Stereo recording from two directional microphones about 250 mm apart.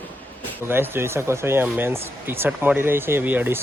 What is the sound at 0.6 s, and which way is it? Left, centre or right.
Speech, centre.